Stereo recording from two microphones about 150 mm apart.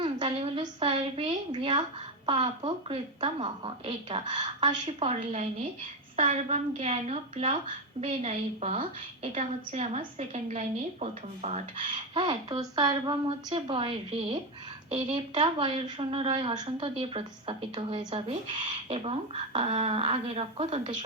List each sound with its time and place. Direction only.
0.0 s a sound: 35° right (ahead or behind)
2.2 s a woman's voice: 35° right (ahead or behind)
12.1 s a woman's voice: 30° right (ahead or behind)